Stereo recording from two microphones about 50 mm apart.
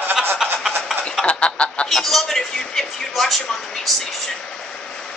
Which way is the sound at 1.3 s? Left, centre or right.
Left.